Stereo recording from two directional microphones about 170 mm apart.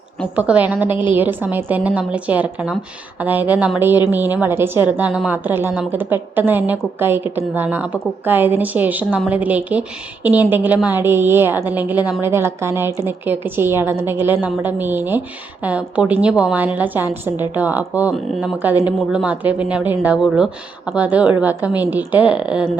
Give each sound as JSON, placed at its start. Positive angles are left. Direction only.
{"t": 0.3, "sound": "a woman's voice", "side_deg": -10}